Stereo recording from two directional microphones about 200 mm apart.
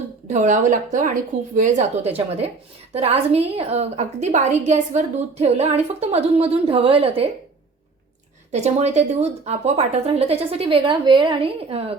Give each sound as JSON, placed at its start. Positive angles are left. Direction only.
{"t": 0.3, "sound": "a woman's voice", "side_deg": -40}
{"t": 8.5, "sound": "speech", "side_deg": -35}